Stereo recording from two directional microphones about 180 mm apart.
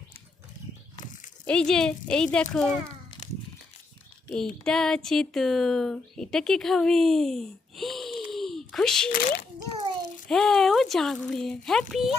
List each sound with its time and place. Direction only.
1.5 s speech: 5° left (ahead or behind)
3.2 s crumpling: 40° left (ahead or behind)
4.3 s speech: 5° left (ahead or behind)
8.3 s a sound: centre (ahead or behind)
10.2 s speech: 5° left (ahead or behind)